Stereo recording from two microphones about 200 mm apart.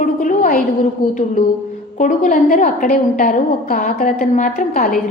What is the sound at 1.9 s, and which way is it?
A woman's voice, 40° left (ahead or behind).